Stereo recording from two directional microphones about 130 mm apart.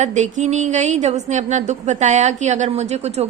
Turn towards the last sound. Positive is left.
turn(degrees=-55)  # may be behind; listen again after turning